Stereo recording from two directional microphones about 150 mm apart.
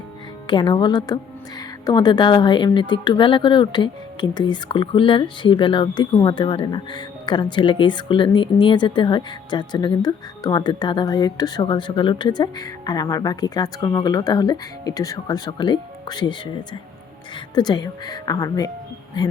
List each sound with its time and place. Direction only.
0.4 s speech: 30° left (ahead or behind)
17.5 s speech: 30° left (ahead or behind)